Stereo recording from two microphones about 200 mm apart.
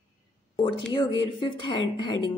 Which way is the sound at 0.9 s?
20° left (ahead or behind).